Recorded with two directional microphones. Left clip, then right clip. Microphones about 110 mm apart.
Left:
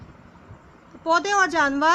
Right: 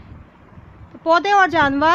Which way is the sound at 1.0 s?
35° right (ahead or behind).